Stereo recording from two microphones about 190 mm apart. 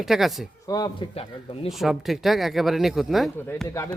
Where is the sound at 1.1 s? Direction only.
30° left (ahead or behind).